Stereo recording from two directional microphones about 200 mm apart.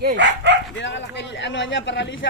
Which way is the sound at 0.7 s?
65° left (ahead or behind).